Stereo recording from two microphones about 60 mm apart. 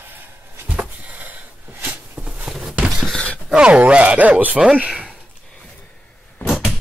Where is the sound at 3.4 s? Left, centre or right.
Centre.